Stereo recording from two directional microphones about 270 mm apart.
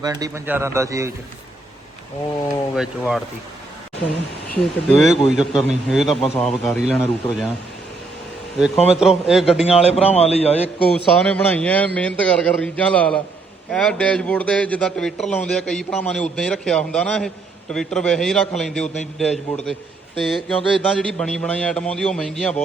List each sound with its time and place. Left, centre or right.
0.0 s a man's voice: centre
2.7 s a man's voice: centre
4.5 s a man's voice: centre
8.5 s a man's voice: centre
9.9 s a man's voice: left
10.9 s a man's voice: centre